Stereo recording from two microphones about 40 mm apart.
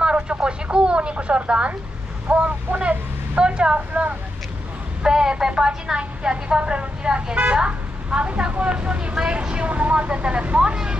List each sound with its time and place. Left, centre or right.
0.0 s speech: right
3.3 s speech: right
5.0 s a woman's voice: centre